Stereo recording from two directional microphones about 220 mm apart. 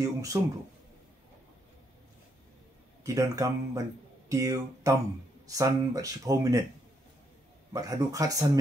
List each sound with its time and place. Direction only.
0.0 s speech: 15° right (ahead or behind)
3.0 s speech: 15° right (ahead or behind)
7.7 s speech: 15° right (ahead or behind)